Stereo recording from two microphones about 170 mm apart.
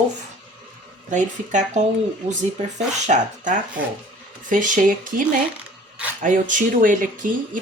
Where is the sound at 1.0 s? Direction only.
45° right (ahead or behind).